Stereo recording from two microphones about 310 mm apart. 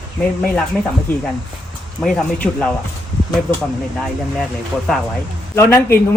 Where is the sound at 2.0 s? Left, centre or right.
Centre.